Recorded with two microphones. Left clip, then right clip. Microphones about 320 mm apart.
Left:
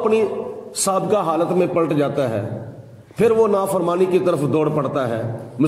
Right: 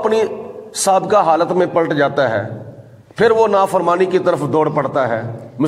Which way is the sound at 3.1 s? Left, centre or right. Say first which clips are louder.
Right 4 dB; right.